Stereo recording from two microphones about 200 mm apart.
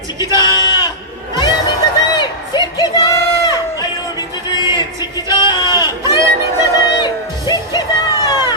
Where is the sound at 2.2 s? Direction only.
20° left (ahead or behind).